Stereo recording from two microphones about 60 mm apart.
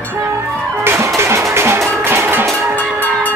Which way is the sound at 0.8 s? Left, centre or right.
Right.